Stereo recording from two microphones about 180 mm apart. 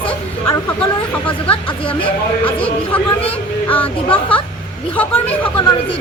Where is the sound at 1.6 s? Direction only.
30° left (ahead or behind).